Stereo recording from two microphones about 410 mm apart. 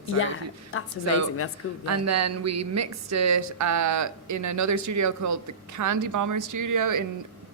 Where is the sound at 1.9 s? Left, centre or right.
Right.